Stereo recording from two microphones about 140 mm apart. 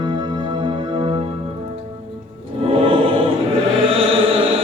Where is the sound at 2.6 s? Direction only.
40° right (ahead or behind).